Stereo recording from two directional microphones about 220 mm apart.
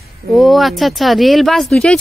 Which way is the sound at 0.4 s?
Centre (ahead or behind).